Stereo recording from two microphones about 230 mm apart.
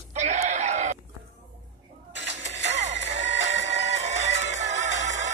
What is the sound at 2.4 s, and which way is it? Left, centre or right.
Music, right.